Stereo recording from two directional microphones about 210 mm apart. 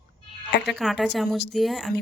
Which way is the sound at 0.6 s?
Centre (ahead or behind).